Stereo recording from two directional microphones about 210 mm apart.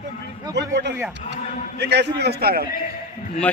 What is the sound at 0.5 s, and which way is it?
Speech, 55° right (ahead or behind).